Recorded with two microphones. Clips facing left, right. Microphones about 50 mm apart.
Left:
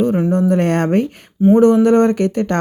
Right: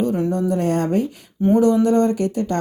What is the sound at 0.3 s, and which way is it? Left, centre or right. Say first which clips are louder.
Speech: left 5 dB; left.